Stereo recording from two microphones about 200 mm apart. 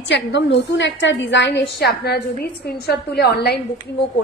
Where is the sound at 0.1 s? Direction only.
60° left (ahead or behind).